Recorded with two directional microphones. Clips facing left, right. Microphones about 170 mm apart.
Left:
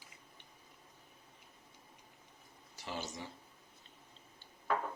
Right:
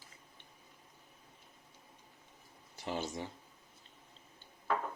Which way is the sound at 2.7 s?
55° right (ahead or behind).